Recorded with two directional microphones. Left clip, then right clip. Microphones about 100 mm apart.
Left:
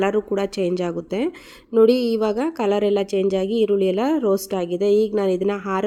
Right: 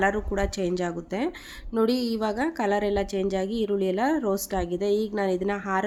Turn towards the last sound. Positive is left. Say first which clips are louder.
# left 4 dB
turn(degrees=35)  # may be behind; listen again after turning